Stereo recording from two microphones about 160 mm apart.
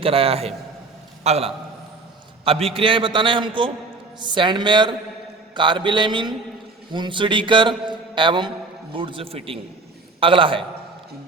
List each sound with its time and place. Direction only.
0.0 s a man's voice: 35° right (ahead or behind)